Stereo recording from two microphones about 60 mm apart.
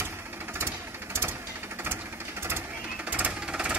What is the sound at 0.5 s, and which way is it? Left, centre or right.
Engine, right.